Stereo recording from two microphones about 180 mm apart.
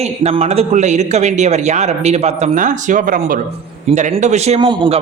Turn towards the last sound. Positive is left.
turn(degrees=-25)  # may be behind; listen again after turning